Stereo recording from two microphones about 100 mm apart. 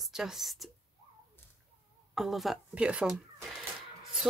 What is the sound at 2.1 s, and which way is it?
A woman's voice, centre (ahead or behind).